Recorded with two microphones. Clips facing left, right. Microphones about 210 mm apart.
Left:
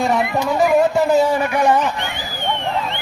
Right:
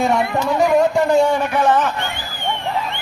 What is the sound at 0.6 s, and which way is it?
A man's voice, 5° left (ahead or behind).